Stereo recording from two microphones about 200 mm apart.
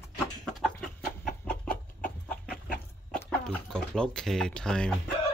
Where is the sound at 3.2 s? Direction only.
5° left (ahead or behind).